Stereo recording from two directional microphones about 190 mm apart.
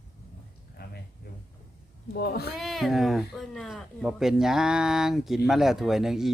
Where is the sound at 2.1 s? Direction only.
55° left (ahead or behind).